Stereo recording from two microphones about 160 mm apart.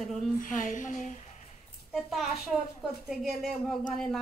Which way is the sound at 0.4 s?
55° left (ahead or behind).